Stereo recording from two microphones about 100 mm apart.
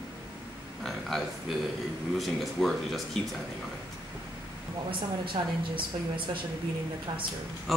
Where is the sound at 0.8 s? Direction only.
Centre (ahead or behind).